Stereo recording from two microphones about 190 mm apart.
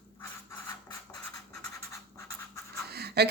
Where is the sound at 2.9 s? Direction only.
60° right (ahead or behind).